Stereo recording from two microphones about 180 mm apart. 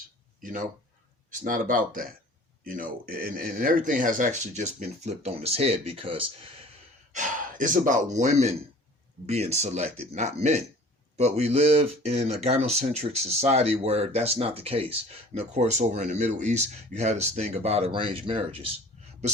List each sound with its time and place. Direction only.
0.4 s speech: 45° right (ahead or behind); by 6.5 s 30° right (ahead or behind)
7.1 s speech: 45° right (ahead or behind)